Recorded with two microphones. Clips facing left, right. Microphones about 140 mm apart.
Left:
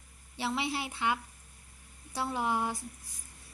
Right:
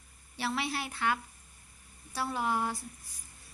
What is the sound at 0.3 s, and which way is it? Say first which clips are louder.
A woman's voice: left 1 dB; 20° left (ahead or behind).